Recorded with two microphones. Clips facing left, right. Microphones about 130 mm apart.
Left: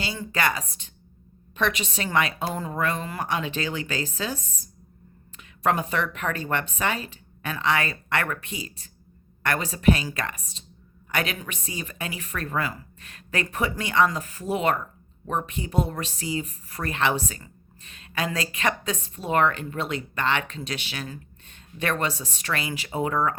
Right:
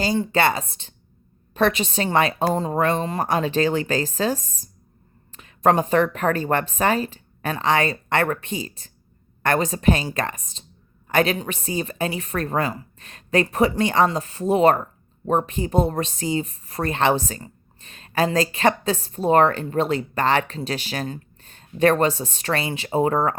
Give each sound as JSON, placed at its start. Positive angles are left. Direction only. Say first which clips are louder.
{"t": 0.0, "sound": "a woman's voice", "louder": "right 7 dB", "side_deg": -35}